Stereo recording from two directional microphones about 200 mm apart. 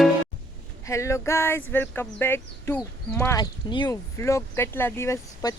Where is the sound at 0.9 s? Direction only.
15° left (ahead or behind).